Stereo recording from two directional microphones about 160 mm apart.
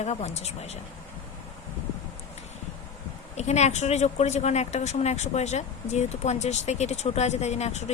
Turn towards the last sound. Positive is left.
turn(degrees=45)  # may be behind; listen again after turning